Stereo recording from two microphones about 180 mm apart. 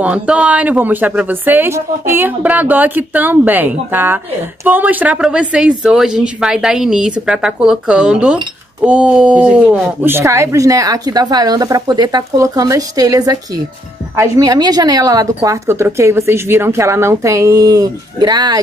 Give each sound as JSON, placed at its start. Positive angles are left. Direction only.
{"t": 0.0, "sound": "a woman's voice", "side_deg": -5}